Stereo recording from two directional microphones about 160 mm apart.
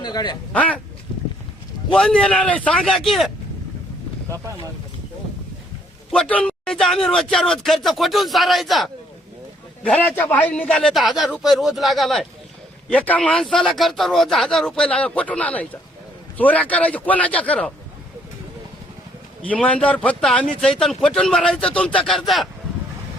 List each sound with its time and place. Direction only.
0.0 s speech: 25° left (ahead or behind)
0.5 s a man's voice: 10° left (ahead or behind)
1.9 s speech: 5° left (ahead or behind)
6.1 s a man's voice: 5° left (ahead or behind)
19.5 s speech: 5° left (ahead or behind)